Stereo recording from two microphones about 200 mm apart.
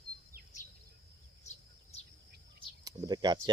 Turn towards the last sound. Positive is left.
turn(degrees=-20)  # may be behind; listen again after turning